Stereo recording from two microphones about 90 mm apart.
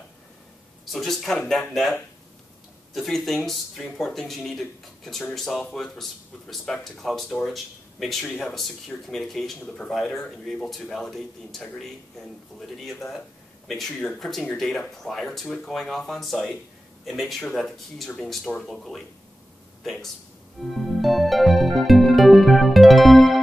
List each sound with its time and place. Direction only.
0.9 s speech: 5° left (ahead or behind)
13.7 s speech: 5° left (ahead or behind)
20.7 s music: centre (ahead or behind)